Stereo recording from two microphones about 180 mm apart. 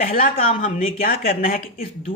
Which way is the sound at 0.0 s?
55° left (ahead or behind).